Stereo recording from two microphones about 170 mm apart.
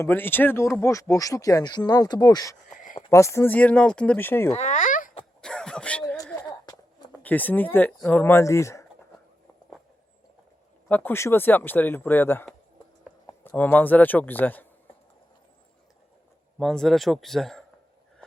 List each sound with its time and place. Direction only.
0.0 s speech: 10° left (ahead or behind)
2.6 s a sound: 50° left (ahead or behind)
3.1 s speech: 15° left (ahead or behind)
4.5 s babbling: 45° left (ahead or behind)
5.4 s a sound: 5° left (ahead or behind)
6.4 s a sound: 25° left (ahead or behind)
7.1 s speech: 10° left (ahead or behind)
10.8 s speech: 10° left (ahead or behind)
16.6 s speech: centre (ahead or behind)